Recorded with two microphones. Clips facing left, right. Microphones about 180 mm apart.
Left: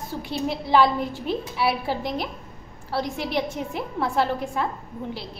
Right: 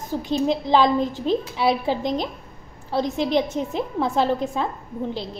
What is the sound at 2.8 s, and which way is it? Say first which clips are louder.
Speech: right 5 dB; 20° right (ahead or behind).